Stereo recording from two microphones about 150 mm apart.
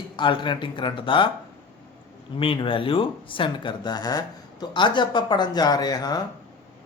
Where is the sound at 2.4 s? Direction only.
35° left (ahead or behind).